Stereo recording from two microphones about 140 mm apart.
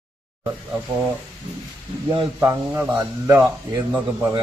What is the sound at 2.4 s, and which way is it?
A man's voice, 20° right (ahead or behind).